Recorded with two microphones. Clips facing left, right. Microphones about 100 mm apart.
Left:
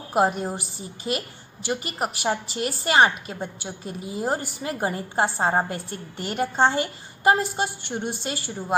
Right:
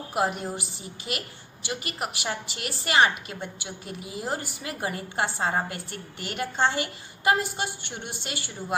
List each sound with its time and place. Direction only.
0.1 s a woman's voice: 35° left (ahead or behind)